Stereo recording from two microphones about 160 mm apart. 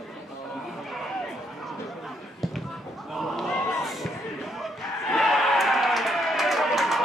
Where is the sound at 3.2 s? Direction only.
Centre (ahead or behind).